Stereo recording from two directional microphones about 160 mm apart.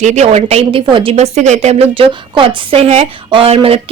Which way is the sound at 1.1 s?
45° right (ahead or behind).